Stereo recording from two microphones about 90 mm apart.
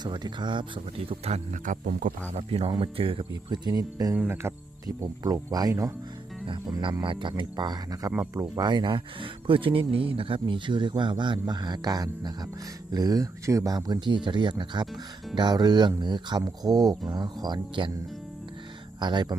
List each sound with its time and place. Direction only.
0.0 s speech: 55° right (ahead or behind); by 1.2 s 75° right (ahead or behind)
2.5 s speech: 90° right
3.5 s speech: 50° right (ahead or behind)
4.4 s speech: 30° right (ahead or behind)
5.2 s speech: 45° right (ahead or behind)
6.4 s speech: 65° right (ahead or behind); by 13.7 s 35° right (ahead or behind)
13.7 s speech: 50° right (ahead or behind)
18.9 s speech: 55° right (ahead or behind)